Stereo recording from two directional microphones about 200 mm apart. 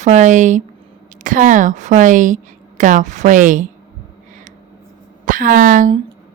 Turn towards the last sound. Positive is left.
turn(degrees=-40)  # may be behind; listen again after turning